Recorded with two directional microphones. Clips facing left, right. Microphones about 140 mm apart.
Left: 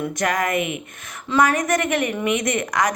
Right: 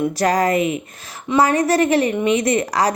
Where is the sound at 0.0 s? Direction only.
35° right (ahead or behind).